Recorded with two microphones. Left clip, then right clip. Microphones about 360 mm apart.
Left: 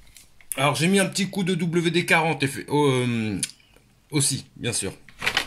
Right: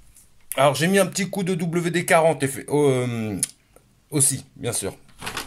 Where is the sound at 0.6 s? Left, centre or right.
Right.